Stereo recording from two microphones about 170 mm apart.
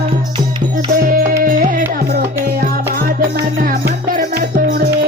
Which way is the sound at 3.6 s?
55° right (ahead or behind).